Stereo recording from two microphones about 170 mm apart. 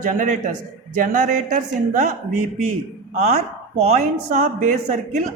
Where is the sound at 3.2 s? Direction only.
40° right (ahead or behind).